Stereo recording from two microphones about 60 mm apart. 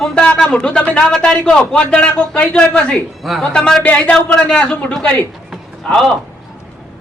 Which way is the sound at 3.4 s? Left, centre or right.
Centre.